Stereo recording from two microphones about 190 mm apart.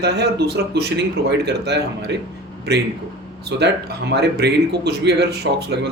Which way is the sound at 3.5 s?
60° right (ahead or behind).